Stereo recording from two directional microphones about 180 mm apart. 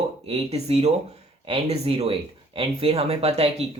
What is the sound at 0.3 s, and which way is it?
Speech, 35° right (ahead or behind).